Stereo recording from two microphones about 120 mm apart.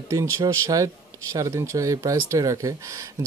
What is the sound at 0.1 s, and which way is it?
Speech, 25° right (ahead or behind).